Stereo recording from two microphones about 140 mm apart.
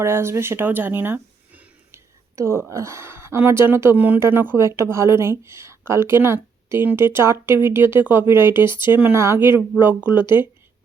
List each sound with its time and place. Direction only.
0.0 s speech: 20° right (ahead or behind)